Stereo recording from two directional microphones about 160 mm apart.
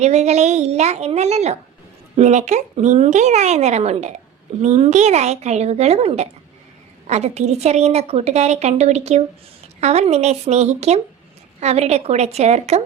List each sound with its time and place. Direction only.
0.0 s a woman's voice: 45° right (ahead or behind)